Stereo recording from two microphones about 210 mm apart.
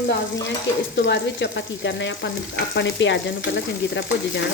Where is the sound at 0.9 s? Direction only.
60° left (ahead or behind).